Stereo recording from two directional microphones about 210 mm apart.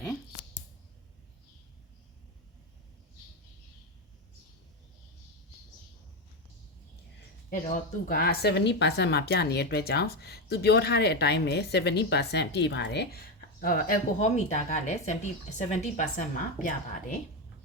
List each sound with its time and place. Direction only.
8.0 s a woman's voice: 45° left (ahead or behind)
13.6 s speech: 40° left (ahead or behind)